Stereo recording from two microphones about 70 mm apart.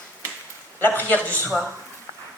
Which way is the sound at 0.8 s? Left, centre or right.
Left.